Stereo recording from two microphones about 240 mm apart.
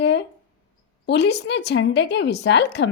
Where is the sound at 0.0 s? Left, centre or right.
Left.